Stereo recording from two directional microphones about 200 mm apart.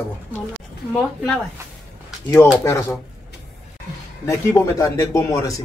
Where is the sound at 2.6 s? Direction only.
15° left (ahead or behind).